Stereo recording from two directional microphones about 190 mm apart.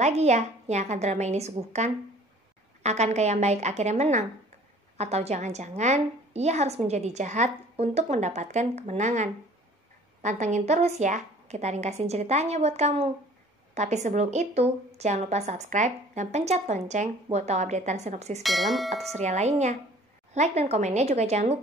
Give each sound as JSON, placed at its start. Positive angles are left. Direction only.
{"t": 0.0, "sound": "a woman's voice", "side_deg": -35}
{"t": 18.4, "sound": "bell", "side_deg": 0}
{"t": 19.1, "sound": "a woman's voice", "side_deg": -35}